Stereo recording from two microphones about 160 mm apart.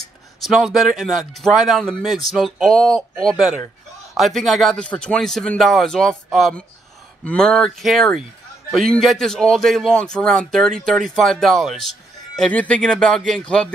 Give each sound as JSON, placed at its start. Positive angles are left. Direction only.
{"t": 0.4, "sound": "speech", "side_deg": 0}
{"t": 4.1, "sound": "speech", "side_deg": 0}